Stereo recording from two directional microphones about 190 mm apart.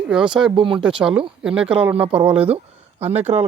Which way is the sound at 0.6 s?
25° right (ahead or behind).